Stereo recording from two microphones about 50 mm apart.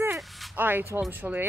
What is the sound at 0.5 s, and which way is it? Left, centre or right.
Speech, right.